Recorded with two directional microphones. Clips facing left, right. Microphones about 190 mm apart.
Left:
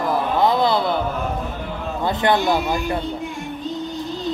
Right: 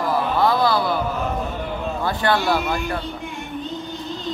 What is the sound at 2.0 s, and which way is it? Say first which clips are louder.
Speech: left 3 dB; 20° left (ahead or behind).